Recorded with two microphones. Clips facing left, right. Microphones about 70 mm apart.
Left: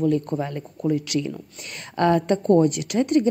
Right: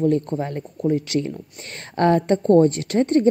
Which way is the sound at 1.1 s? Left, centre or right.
Right.